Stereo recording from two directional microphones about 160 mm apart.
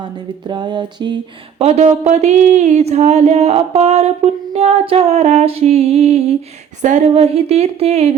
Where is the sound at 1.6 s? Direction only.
45° right (ahead or behind).